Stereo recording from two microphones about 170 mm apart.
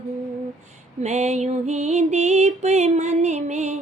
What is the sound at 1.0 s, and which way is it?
Music, 40° right (ahead or behind).